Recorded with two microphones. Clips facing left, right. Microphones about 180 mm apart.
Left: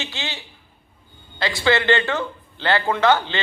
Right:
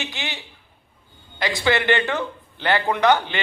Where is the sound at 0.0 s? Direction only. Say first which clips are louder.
Even; 15° right (ahead or behind).